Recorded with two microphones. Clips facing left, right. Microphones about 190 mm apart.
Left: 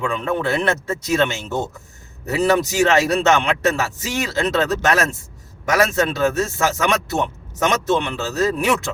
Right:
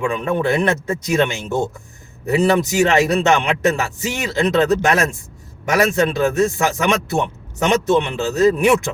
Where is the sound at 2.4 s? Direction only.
15° right (ahead or behind).